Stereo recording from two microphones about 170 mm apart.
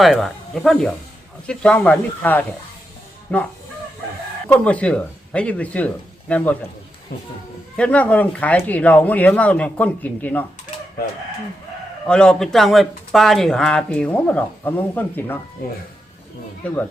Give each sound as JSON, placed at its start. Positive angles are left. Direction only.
{"t": 0.0, "sound": "speech", "side_deg": 0}
{"t": 7.8, "sound": "speech", "side_deg": 10}
{"t": 12.0, "sound": "speech", "side_deg": 5}
{"t": 16.6, "sound": "speech", "side_deg": 5}